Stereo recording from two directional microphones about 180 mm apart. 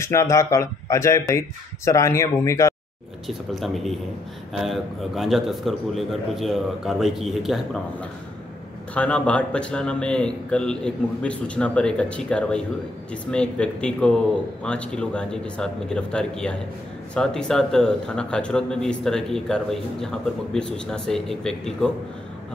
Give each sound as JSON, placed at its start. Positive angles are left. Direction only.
{"t": 0.0, "sound": "speech", "side_deg": 15}
{"t": 3.3, "sound": "a man's voice", "side_deg": 0}